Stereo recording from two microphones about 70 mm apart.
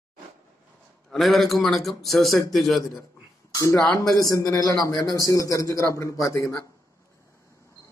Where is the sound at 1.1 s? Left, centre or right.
Centre.